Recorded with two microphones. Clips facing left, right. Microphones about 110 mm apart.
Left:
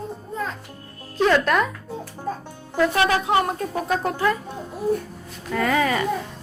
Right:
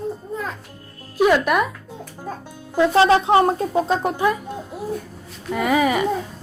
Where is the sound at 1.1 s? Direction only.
10° right (ahead or behind).